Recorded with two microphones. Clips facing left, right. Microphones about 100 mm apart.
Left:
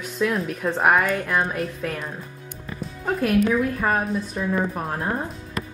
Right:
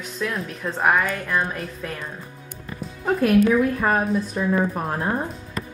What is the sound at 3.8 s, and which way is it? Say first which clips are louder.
Speech: right 1 dB; 20° right (ahead or behind).